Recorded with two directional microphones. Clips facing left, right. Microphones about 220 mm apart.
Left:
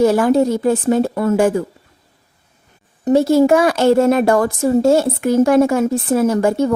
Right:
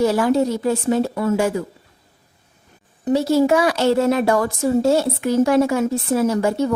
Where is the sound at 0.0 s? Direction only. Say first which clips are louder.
Left 4 dB; 50° left (ahead or behind).